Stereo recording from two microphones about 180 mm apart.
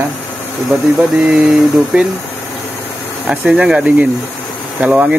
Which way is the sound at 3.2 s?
5° right (ahead or behind).